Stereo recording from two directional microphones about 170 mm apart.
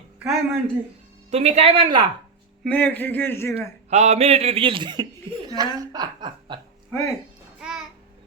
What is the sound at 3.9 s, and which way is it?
Speech, 40° right (ahead or behind).